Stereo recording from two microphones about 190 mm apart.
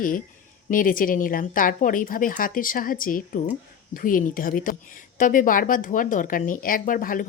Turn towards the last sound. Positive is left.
turn(degrees=45)  # may be behind; listen again after turning